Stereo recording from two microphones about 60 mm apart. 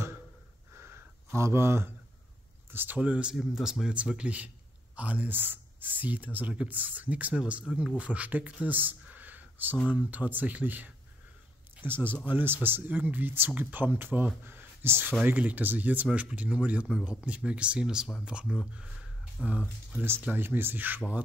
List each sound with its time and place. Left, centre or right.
0.7 s a sound: right
2.7 s speech: right
3.0 s speech: right
3.3 s speech: centre
3.9 s speech: centre
8.6 s a sound: right
10.1 s speech: right
15.2 s speech: right